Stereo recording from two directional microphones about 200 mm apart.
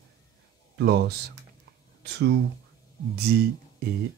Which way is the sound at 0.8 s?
50° right (ahead or behind).